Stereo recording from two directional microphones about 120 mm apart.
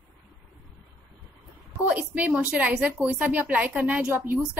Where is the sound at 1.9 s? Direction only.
10° right (ahead or behind).